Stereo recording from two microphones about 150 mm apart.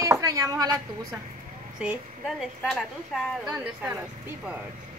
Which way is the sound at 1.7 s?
5° right (ahead or behind).